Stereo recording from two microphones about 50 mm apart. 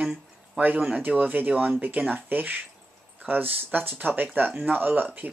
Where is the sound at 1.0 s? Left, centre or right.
Right.